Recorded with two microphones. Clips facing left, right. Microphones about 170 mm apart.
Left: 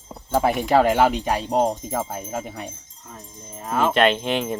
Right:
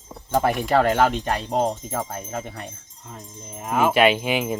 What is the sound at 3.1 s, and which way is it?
Wind chime, 15° right (ahead or behind).